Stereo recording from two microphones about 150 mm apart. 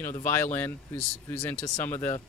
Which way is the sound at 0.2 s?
15° left (ahead or behind).